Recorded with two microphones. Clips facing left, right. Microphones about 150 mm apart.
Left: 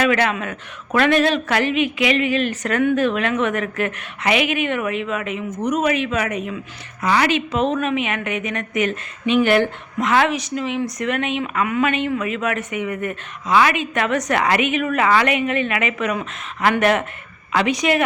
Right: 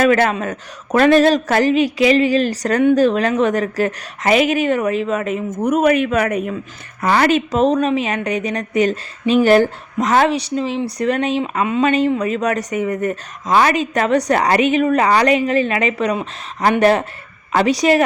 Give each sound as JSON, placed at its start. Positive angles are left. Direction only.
{"t": 0.0, "sound": "speech", "side_deg": -40}